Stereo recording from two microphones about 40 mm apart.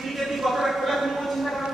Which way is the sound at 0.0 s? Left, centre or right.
Centre.